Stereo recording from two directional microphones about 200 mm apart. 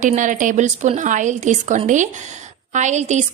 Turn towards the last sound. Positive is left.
turn(degrees=-35)  # may be behind; listen again after turning